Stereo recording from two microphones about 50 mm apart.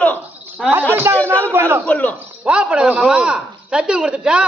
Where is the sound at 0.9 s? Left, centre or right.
Right.